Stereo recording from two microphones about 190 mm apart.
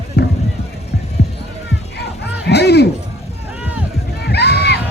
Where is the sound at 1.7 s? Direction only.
60° left (ahead or behind).